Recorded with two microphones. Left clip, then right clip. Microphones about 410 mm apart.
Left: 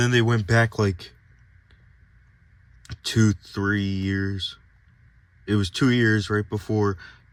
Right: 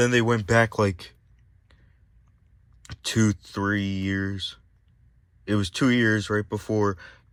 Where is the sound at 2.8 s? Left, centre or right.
Centre.